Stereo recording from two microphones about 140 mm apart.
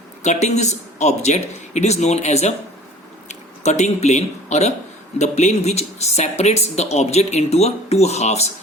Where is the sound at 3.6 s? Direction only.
55° left (ahead or behind).